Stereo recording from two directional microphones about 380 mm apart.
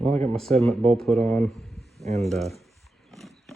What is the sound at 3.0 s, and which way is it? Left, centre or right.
Roaring cats, centre.